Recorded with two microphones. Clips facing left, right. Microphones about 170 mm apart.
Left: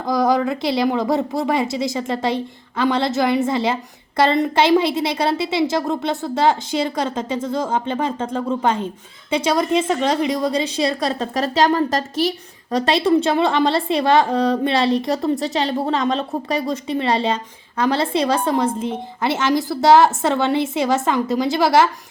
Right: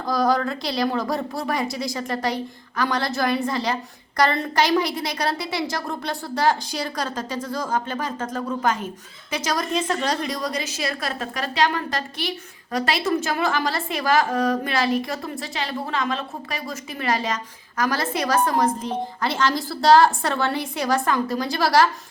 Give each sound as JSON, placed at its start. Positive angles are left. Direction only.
{"t": 0.0, "sound": "a woman's voice", "side_deg": 20}